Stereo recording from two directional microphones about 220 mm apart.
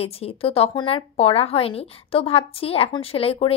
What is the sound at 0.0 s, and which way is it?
A woman's voice, 25° left (ahead or behind).